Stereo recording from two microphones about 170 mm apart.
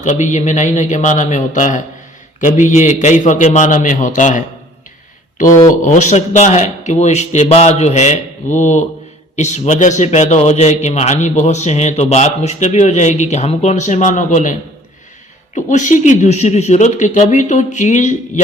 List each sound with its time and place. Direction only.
0.0 s a man's voice: 45° left (ahead or behind)
5.8 s a man's voice: 45° left (ahead or behind)
15.5 s a man's voice: 45° left (ahead or behind)